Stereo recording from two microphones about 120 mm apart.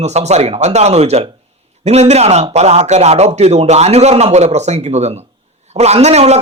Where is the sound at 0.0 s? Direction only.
70° right (ahead or behind).